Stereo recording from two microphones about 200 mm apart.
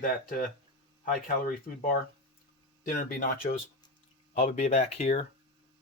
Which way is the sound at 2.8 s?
45° left (ahead or behind).